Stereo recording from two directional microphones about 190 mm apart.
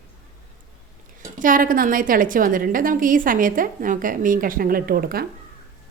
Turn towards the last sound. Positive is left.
turn(degrees=-50)  # may be behind; listen again after turning